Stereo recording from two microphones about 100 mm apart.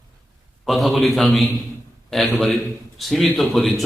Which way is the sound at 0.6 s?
Centre (ahead or behind).